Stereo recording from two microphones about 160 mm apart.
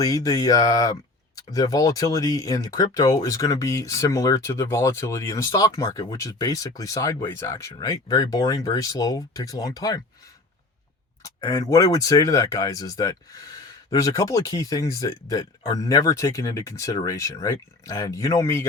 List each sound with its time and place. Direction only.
0.0 s speech: 20° left (ahead or behind)
11.2 s speech: 20° left (ahead or behind)